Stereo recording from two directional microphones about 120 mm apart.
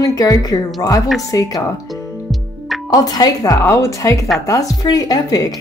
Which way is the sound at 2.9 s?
35° left (ahead or behind).